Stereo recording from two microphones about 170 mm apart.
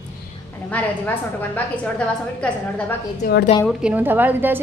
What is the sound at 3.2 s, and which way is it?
Speech, 60° left (ahead or behind).